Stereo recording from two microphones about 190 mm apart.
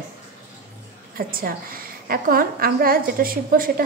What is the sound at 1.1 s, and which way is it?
A woman's voice, 50° right (ahead or behind).